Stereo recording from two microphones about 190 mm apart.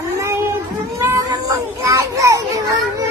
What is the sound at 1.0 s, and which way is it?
Children playing, 15° right (ahead or behind).